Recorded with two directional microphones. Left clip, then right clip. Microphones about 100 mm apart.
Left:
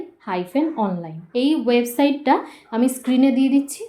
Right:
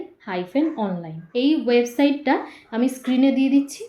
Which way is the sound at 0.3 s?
40° left (ahead or behind).